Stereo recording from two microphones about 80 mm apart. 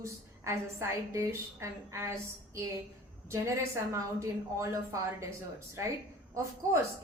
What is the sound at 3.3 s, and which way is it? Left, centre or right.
A woman's voice, right.